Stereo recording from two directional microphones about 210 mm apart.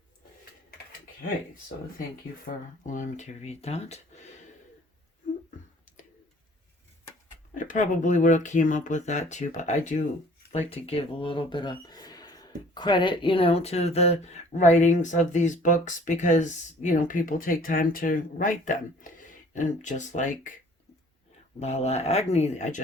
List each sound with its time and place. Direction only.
2.8 s speech: 35° left (ahead or behind)
7.5 s speech: 40° left (ahead or behind)
21.6 s speech: 30° left (ahead or behind)